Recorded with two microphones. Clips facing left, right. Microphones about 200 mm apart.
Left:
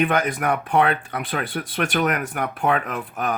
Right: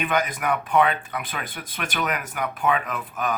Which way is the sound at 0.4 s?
50° left (ahead or behind).